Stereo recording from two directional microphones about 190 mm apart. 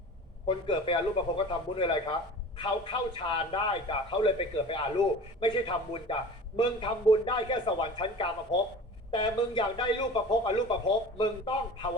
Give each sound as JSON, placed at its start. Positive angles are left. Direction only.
{"t": 0.4, "sound": "a man's voice", "side_deg": 25}